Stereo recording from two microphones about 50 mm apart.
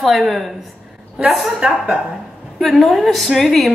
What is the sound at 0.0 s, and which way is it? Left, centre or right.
A woman's voice, centre.